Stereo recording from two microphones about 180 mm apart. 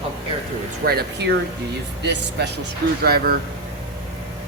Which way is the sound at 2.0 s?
70° right (ahead or behind).